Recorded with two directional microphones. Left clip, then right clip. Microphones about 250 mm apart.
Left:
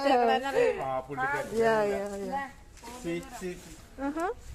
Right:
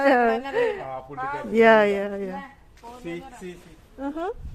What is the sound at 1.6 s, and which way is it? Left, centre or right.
Speech, right.